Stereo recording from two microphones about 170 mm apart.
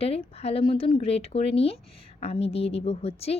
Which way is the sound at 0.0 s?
35° left (ahead or behind).